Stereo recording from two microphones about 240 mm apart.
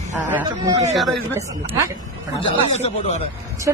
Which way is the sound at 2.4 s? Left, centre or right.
Left.